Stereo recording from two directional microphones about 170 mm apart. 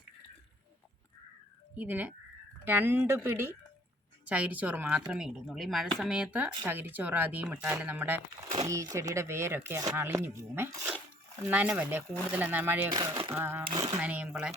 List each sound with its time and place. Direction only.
1.7 s speech: 10° right (ahead or behind)
12.9 s speech: 25° right (ahead or behind)
13.3 s speech: 10° right (ahead or behind)